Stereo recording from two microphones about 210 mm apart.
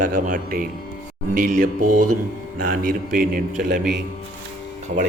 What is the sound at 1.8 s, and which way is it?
Speech, 90° right.